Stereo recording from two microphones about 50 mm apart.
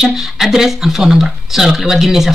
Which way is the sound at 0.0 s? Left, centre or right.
Centre.